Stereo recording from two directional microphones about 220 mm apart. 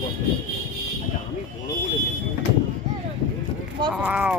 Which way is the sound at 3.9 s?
5° right (ahead or behind).